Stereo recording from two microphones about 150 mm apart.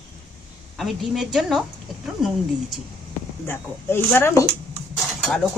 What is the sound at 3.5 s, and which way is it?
Speech, 15° left (ahead or behind).